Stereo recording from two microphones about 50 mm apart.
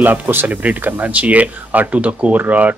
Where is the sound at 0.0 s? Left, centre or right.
Right.